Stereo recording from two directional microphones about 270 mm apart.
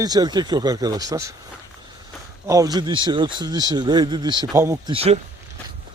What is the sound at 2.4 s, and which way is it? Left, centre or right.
Speech, centre.